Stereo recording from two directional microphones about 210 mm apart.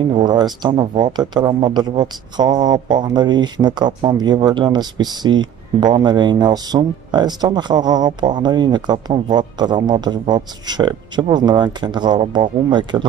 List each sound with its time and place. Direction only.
0.1 s a man's voice: 20° right (ahead or behind)